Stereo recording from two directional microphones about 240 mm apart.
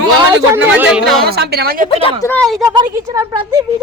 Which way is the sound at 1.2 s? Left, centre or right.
Right.